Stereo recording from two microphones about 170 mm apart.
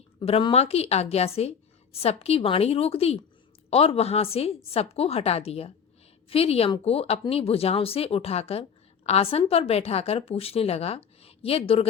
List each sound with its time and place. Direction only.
0.2 s a woman's voice: 35° left (ahead or behind)